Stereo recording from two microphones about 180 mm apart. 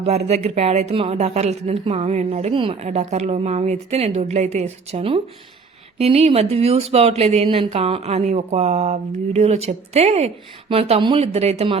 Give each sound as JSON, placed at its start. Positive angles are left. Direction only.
{"t": 0.3, "sound": "speech", "side_deg": -35}